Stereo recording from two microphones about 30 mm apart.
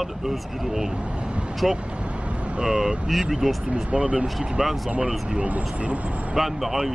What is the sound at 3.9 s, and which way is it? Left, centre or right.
Speech, right.